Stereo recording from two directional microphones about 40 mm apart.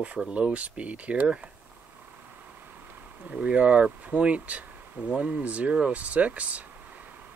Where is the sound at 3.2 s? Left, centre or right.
Right.